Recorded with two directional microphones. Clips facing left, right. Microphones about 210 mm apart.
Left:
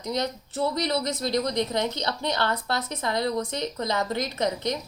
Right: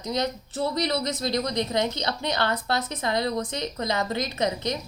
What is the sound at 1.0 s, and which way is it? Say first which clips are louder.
Speech: left 1 dB; 20° right (ahead or behind).